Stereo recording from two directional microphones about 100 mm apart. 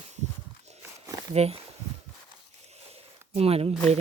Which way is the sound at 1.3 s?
90° right.